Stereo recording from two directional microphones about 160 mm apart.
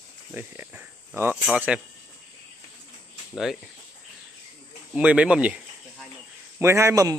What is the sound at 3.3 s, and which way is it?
Speech, centre (ahead or behind).